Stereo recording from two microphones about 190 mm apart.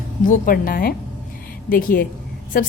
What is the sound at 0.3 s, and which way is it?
A woman's voice, 50° left (ahead or behind).